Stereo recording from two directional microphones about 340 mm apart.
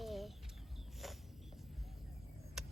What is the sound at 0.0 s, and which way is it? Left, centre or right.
Chicken, centre.